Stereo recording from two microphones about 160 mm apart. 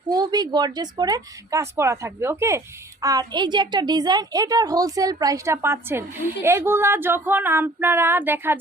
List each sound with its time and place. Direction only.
0.1 s a woman's voice: 25° right (ahead or behind)